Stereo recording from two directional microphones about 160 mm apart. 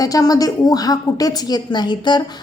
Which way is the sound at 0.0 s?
20° left (ahead or behind).